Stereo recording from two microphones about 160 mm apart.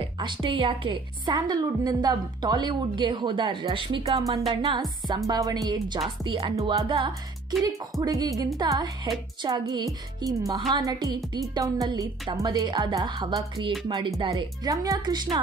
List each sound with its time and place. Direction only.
0.2 s a woman's voice: 30° right (ahead or behind)
4.5 s music: 30° right (ahead or behind)
5.0 s a woman's voice: 25° right (ahead or behind)